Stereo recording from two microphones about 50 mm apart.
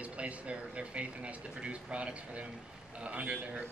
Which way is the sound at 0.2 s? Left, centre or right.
Right.